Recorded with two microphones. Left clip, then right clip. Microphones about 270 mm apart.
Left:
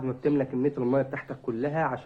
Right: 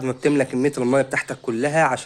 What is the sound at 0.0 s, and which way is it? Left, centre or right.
Speech, right.